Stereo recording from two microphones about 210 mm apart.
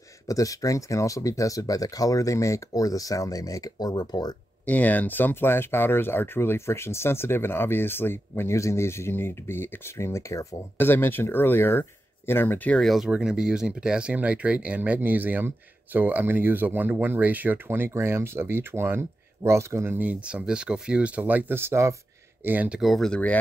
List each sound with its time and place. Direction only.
0.3 s speech: 15° left (ahead or behind)
4.6 s speech: 5° left (ahead or behind)